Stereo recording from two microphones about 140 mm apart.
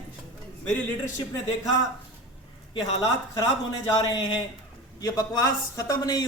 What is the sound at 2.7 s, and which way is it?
A man's voice, 30° left (ahead or behind).